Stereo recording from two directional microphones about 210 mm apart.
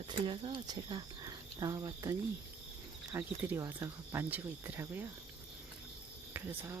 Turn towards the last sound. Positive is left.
turn(degrees=-10)  # may be behind; listen again after turning